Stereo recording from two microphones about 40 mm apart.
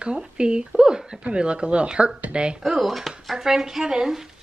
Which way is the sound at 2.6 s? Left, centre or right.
Centre.